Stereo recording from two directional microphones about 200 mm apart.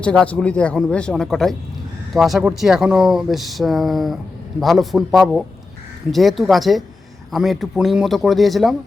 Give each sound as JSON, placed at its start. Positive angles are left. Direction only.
{"t": 0.0, "sound": "speech", "side_deg": 5}